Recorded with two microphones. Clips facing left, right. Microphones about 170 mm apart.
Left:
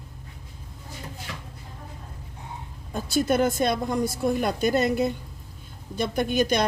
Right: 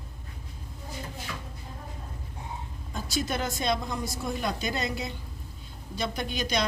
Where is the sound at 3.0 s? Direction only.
55° left (ahead or behind).